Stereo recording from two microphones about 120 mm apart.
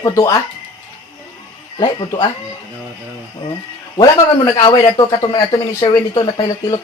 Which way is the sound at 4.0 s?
35° left (ahead or behind).